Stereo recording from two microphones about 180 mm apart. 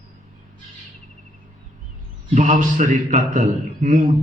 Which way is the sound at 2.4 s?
45° right (ahead or behind).